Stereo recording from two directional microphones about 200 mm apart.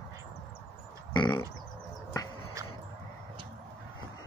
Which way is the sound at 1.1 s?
20° left (ahead or behind).